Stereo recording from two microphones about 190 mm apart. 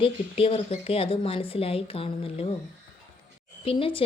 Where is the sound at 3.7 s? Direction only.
30° left (ahead or behind).